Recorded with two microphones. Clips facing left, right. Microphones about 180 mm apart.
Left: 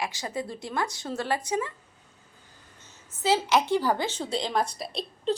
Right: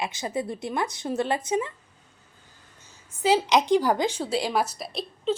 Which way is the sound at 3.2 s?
15° right (ahead or behind).